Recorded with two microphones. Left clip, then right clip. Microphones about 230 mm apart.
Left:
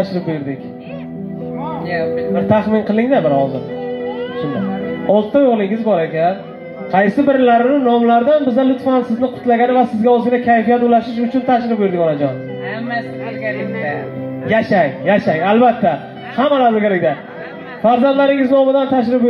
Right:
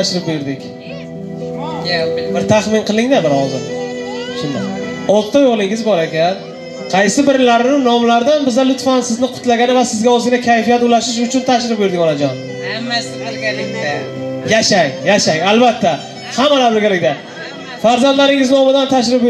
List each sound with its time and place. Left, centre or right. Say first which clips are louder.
1.9 s a man's voice: right 2 dB; right
5.0 s a man's voice: right 1 dB; right
14.5 s a man's voice: right 2 dB; right